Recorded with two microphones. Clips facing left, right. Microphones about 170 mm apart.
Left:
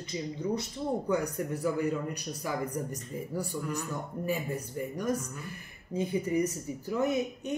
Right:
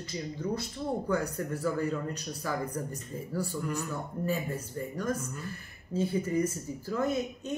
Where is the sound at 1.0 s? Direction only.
15° left (ahead or behind).